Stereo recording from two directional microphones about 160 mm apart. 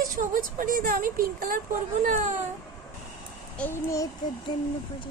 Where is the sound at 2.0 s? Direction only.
50° right (ahead or behind).